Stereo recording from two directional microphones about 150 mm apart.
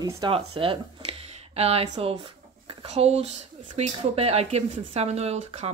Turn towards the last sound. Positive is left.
turn(degrees=-45)  # may be behind; listen again after turning